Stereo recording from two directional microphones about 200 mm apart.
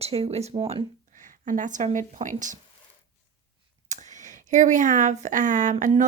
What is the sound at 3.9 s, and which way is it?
A woman's voice, 35° right (ahead or behind).